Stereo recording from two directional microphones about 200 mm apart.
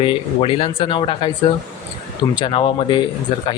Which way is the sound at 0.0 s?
25° left (ahead or behind).